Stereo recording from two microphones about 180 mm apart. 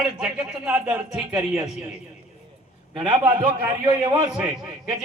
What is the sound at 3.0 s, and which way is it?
Speech, 10° right (ahead or behind).